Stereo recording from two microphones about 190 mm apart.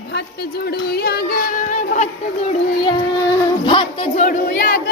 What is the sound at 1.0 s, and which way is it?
Female singing, 50° left (ahead or behind).